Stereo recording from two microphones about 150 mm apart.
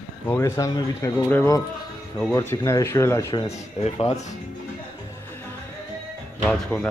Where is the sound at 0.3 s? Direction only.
20° left (ahead or behind).